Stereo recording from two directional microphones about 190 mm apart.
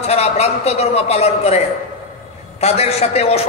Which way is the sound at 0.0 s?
35° left (ahead or behind).